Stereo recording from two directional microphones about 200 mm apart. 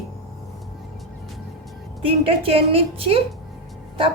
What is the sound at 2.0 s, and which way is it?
A woman's voice, 25° right (ahead or behind).